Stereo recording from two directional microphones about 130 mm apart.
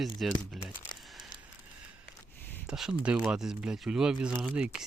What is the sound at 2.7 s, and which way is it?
Speech, 5° right (ahead or behind).